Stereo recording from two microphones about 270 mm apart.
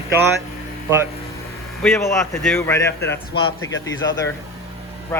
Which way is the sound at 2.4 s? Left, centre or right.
Centre.